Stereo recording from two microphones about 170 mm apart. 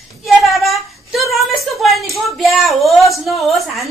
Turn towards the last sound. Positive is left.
turn(degrees=0)  # may be behind; listen again after turning